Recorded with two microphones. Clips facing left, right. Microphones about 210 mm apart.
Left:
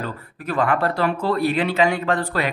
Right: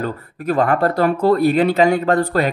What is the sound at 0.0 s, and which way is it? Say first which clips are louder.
Speech: right 6 dB; 40° right (ahead or behind).